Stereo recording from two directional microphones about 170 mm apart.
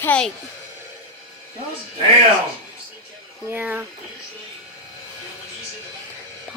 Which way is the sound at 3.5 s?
10° right (ahead or behind).